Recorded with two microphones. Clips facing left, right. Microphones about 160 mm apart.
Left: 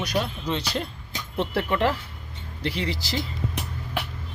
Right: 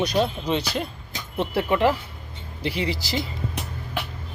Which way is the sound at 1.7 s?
10° right (ahead or behind).